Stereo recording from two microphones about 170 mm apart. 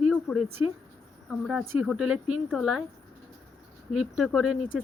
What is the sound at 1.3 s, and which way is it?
A woman's voice, 5° right (ahead or behind).